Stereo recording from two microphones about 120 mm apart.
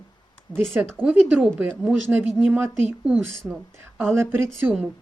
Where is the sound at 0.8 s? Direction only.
15° right (ahead or behind).